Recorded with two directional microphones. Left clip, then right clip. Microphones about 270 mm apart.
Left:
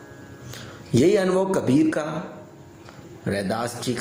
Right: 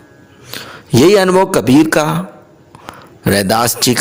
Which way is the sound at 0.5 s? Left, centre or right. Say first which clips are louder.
Right 9 dB; right.